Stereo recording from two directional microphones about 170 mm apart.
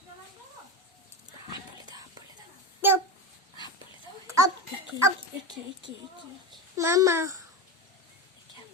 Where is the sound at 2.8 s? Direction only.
10° right (ahead or behind).